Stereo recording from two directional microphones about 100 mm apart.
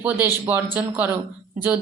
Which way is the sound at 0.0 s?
20° right (ahead or behind).